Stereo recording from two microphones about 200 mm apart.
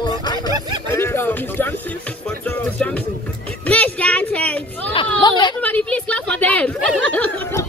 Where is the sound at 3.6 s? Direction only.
5° left (ahead or behind).